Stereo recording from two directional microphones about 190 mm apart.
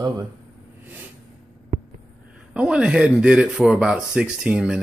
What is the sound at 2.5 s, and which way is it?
Speech, 5° right (ahead or behind).